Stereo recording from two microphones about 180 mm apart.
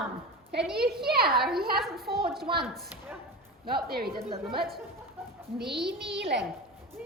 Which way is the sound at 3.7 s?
55° right (ahead or behind).